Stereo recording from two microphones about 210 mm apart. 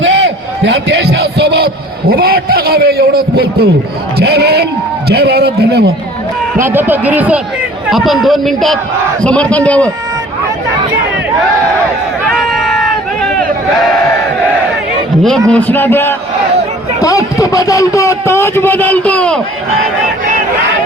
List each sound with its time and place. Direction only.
0.0 s a man's voice: 60° right (ahead or behind)
6.6 s a man's voice: 10° right (ahead or behind); by 9.9 s 5° left (ahead or behind)
12.3 s crowd: centre (ahead or behind)
15.2 s a man's voice: centre (ahead or behind)